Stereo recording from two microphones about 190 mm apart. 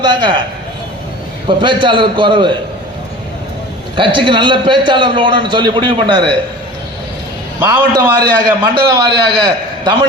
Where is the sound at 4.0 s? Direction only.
25° right (ahead or behind).